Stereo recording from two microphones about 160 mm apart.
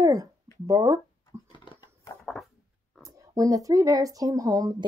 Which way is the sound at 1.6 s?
30° left (ahead or behind).